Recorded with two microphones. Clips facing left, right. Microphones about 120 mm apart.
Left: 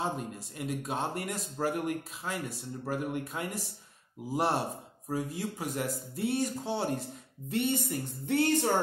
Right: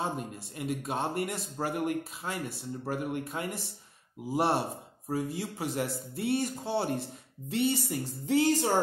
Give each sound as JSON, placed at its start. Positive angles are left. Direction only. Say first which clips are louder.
{"t": 0.6, "sound": "speech", "louder": "right 1 dB", "side_deg": 0}